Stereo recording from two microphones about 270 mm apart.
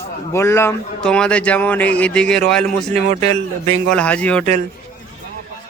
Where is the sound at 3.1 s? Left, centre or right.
Right.